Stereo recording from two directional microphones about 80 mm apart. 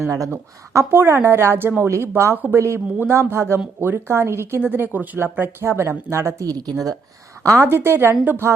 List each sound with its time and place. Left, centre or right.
0.0 s speech: right
0.9 s speech: right
2.3 s speech: right
6.4 s a woman's voice: right
7.7 s speech: right